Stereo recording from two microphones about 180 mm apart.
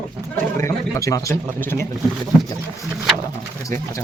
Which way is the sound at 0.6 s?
15° left (ahead or behind).